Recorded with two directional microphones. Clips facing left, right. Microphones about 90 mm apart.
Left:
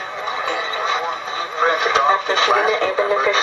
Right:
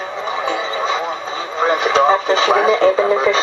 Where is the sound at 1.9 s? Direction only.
25° right (ahead or behind).